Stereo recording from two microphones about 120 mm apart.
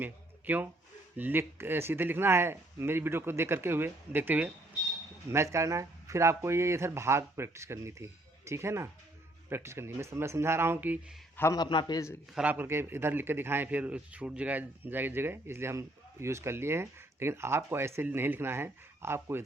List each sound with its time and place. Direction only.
0.0 s a sound: 15° right (ahead or behind)
1.1 s speech: 15° right (ahead or behind)
11.5 s a man's voice: 35° left (ahead or behind)
12.3 s a man's voice: 10° right (ahead or behind)